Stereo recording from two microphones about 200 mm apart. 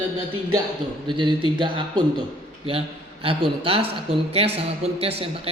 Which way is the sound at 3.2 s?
25° right (ahead or behind).